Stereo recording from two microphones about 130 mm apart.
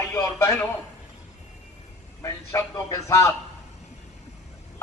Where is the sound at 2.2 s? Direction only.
25° left (ahead or behind).